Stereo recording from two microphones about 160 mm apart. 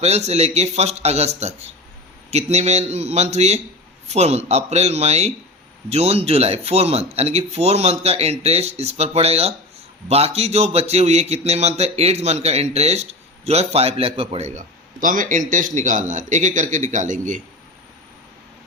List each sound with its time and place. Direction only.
0.0 s a man's voice: 40° right (ahead or behind)
15.0 s a man's voice: 55° right (ahead or behind)